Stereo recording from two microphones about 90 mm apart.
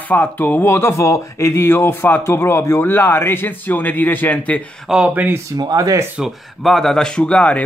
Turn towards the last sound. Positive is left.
turn(degrees=10)  # may be behind; listen again after turning